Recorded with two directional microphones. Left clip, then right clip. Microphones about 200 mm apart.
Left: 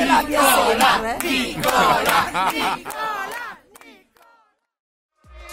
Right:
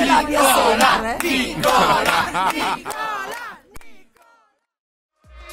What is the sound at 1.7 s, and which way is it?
Speech, centre (ahead or behind).